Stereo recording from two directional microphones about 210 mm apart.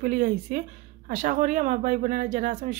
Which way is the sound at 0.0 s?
40° right (ahead or behind).